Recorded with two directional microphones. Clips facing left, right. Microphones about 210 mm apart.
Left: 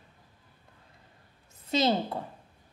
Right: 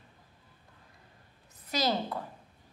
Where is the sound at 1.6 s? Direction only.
25° left (ahead or behind).